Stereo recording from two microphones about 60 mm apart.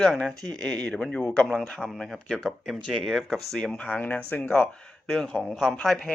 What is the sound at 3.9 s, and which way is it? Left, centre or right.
Speech, left.